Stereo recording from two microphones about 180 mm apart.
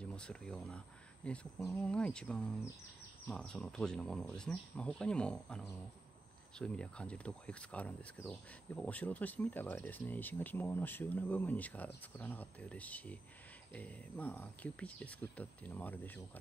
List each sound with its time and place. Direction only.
0.0 s speech: 5° left (ahead or behind)